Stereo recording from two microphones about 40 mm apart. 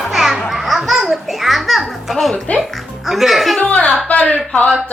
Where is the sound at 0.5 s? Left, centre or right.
Centre.